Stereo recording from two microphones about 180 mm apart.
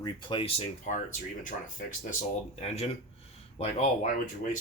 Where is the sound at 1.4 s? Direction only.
50° left (ahead or behind).